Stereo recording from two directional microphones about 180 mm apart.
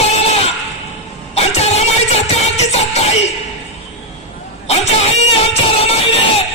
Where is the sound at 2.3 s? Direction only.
35° left (ahead or behind).